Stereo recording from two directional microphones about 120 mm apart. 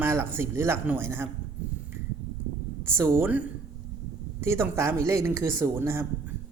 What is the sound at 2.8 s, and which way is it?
Speech, 20° right (ahead or behind).